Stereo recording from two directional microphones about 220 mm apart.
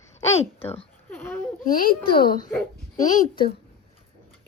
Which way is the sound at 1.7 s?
40° left (ahead or behind).